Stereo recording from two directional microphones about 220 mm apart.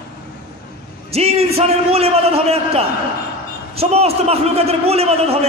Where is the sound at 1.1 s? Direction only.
25° right (ahead or behind).